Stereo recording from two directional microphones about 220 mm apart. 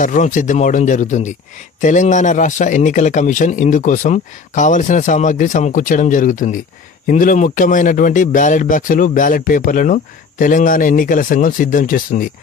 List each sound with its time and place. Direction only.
0.0 s a man's voice: 35° left (ahead or behind)